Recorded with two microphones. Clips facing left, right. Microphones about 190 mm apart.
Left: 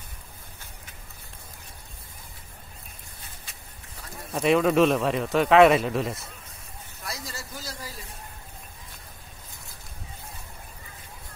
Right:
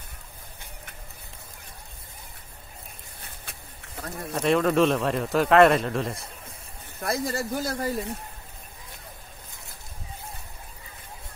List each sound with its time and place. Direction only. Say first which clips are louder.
3.2 s a sound: right 5 dB; 60° right (ahead or behind)
4.3 s speech: left 1 dB; 5° left (ahead or behind)
7.0 s speech: right 11 dB; 55° right (ahead or behind)